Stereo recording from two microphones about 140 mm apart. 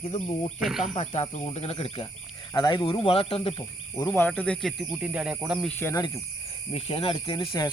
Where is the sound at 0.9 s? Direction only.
50° left (ahead or behind).